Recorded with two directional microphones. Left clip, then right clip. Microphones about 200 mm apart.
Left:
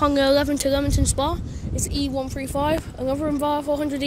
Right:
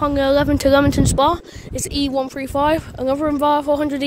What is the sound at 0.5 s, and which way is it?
Speech, 25° right (ahead or behind).